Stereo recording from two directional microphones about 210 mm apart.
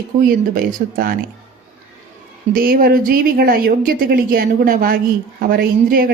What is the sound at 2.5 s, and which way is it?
A woman's voice, 45° right (ahead or behind).